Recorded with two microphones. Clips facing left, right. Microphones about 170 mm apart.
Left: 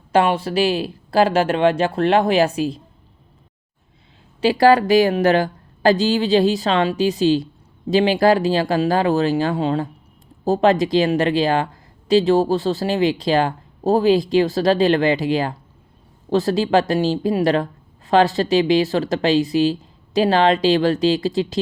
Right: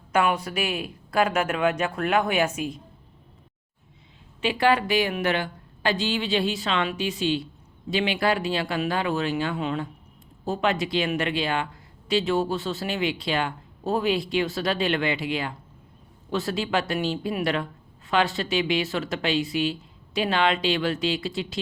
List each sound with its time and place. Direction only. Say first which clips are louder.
0.1 s speech: left 6 dB; 30° left (ahead or behind)
4.4 s speech: left 8 dB; 35° left (ahead or behind)